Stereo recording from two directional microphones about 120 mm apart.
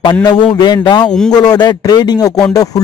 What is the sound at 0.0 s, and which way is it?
Speech, 40° left (ahead or behind).